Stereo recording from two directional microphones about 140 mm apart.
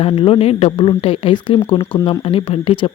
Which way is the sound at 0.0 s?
40° left (ahead or behind).